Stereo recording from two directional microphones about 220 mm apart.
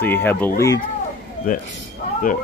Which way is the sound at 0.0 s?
10° left (ahead or behind).